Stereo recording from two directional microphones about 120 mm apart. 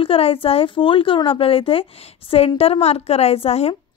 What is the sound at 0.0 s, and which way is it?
A woman's voice, 50° left (ahead or behind).